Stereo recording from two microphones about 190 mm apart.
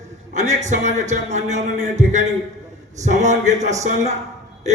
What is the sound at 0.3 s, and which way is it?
A man's voice, 40° right (ahead or behind).